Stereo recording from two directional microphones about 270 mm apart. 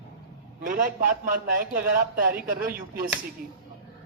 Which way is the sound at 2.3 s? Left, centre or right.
Right.